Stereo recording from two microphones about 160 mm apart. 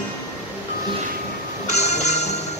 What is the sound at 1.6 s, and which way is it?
Music, 45° left (ahead or behind).